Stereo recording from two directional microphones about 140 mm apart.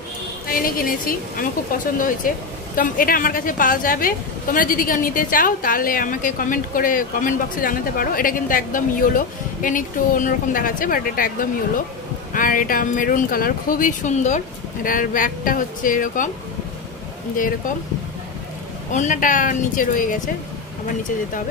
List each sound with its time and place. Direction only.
0.5 s a woman's voice: 90° left
12.4 s speech: 75° left (ahead or behind)
17.4 s speech: 75° left (ahead or behind)
18.9 s speech: 65° left (ahead or behind)